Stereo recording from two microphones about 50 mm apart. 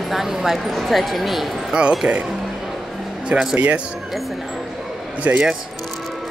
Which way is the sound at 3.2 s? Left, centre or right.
Right.